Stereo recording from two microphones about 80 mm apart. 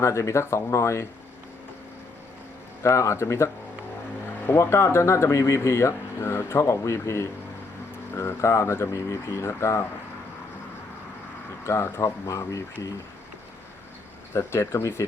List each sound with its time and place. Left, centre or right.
0.0 s speech: left
2.8 s speech: left
11.6 s speech: left
14.3 s speech: left